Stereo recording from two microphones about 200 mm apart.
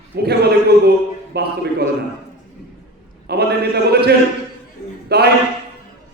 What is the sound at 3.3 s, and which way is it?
A man's voice, 55° right (ahead or behind).